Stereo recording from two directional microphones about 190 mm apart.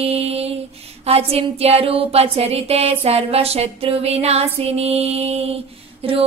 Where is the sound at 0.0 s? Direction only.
30° right (ahead or behind).